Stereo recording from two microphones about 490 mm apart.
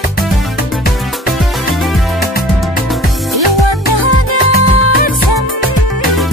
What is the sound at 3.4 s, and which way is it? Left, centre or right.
Music, right.